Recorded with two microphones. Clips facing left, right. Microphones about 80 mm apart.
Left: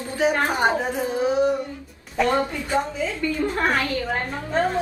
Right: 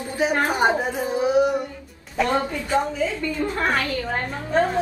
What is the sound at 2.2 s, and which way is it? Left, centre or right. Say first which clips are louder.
Speech: left 1 dB; centre.